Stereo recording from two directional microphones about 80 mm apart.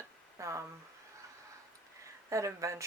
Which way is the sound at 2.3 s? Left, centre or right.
Right.